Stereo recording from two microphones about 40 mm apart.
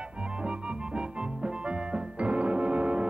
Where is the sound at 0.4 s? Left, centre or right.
Right.